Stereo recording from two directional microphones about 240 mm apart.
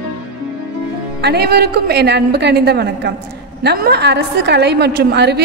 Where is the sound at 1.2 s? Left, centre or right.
Right.